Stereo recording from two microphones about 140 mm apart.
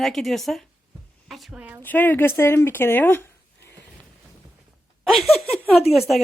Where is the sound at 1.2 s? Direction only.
Centre (ahead or behind).